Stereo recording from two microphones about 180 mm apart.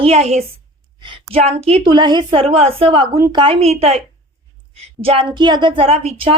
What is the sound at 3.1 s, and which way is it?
Speech, 20° right (ahead or behind).